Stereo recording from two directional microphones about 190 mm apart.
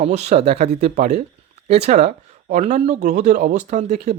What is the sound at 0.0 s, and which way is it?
Speech, 35° right (ahead or behind).